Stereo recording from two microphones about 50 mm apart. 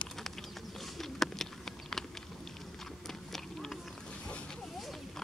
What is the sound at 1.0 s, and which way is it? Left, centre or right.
Bird, centre.